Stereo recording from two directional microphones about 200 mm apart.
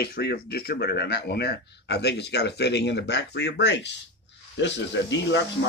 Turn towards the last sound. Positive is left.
turn(degrees=65)  # may be behind; listen again after turning